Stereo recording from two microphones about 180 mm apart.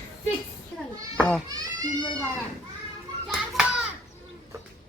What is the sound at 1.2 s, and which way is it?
Goat, 5° left (ahead or behind).